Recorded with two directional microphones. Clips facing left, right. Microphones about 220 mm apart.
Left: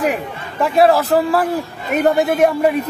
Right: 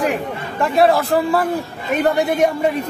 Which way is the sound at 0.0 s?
Centre (ahead or behind).